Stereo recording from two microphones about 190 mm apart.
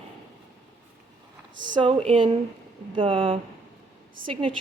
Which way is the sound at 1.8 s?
30° right (ahead or behind).